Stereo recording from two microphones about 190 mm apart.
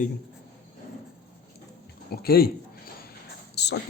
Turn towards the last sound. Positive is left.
turn(degrees=60)  # may be behind; listen again after turning